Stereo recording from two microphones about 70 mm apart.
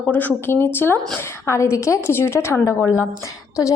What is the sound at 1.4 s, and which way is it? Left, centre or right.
A woman's voice, left.